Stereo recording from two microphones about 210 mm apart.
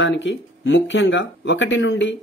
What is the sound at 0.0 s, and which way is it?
Speech, 60° left (ahead or behind).